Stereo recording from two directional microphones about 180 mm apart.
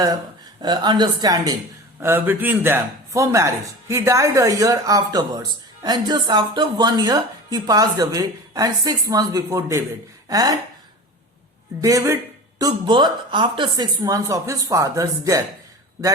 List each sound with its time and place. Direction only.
0.6 s a man's voice: 25° right (ahead or behind)
11.8 s speech: 20° right (ahead or behind)